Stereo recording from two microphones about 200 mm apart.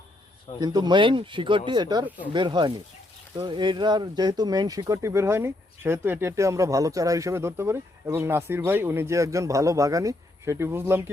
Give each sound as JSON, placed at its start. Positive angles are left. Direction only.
{"t": 0.6, "sound": "speech", "side_deg": -20}